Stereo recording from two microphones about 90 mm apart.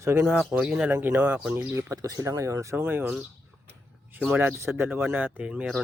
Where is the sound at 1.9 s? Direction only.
40° right (ahead or behind).